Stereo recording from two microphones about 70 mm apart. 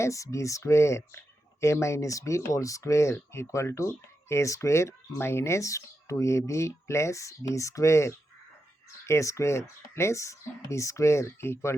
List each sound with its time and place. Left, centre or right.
0.0 s speech: left